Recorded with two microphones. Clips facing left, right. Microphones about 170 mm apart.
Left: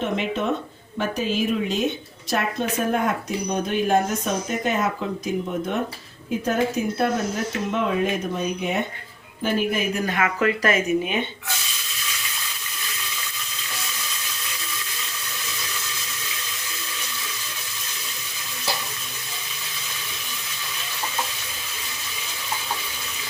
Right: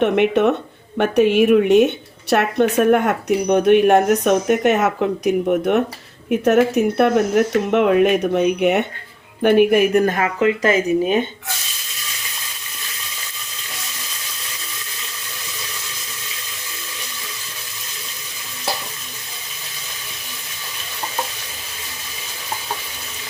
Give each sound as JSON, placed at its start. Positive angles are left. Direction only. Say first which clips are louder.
{"t": 0.0, "sound": "speech", "louder": "right 10 dB", "side_deg": -70}
{"t": 10.4, "sound": "speech", "louder": "right 6 dB", "side_deg": -25}